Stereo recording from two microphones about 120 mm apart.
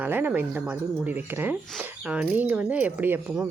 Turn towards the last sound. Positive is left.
turn(degrees=-15)  # may be behind; listen again after turning